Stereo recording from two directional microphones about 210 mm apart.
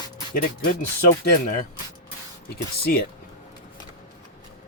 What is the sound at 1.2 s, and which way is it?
Speech, 35° left (ahead or behind).